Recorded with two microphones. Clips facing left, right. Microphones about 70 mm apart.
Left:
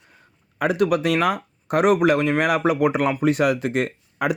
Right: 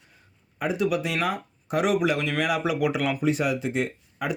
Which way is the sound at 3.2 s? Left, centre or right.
Left.